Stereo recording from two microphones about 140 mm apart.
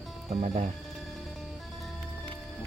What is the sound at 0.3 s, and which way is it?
Speech, 55° right (ahead or behind).